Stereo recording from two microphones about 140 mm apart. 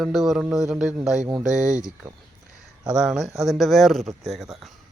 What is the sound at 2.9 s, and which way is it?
A man's voice, 5° right (ahead or behind).